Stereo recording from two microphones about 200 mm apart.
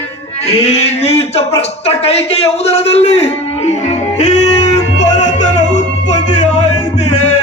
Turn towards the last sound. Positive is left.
turn(degrees=35)  # may be behind; listen again after turning